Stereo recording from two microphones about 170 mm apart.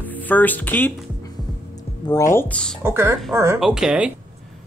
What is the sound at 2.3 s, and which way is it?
Speech, 5° left (ahead or behind).